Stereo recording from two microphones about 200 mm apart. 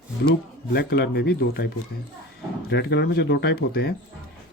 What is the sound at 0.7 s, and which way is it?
Speech, 55° left (ahead or behind).